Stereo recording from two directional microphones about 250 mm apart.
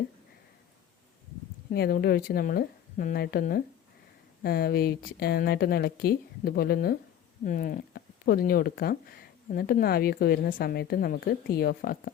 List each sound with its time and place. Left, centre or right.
1.7 s speech: left